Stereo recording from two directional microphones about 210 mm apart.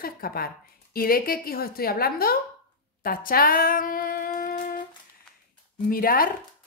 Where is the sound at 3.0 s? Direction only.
45° left (ahead or behind).